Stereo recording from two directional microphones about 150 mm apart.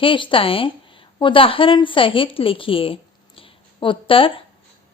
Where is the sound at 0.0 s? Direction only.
35° left (ahead or behind).